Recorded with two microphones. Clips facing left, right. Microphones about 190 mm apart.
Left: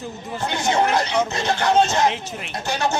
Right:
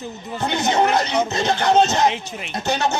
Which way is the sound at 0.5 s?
20° right (ahead or behind).